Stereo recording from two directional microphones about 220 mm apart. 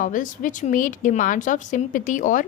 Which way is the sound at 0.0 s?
35° left (ahead or behind).